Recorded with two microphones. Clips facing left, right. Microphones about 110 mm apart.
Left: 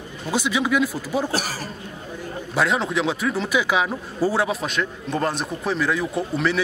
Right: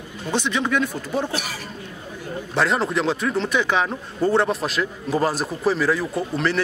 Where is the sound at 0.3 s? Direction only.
5° left (ahead or behind).